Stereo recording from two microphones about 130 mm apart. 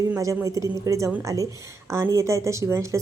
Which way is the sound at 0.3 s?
25° right (ahead or behind).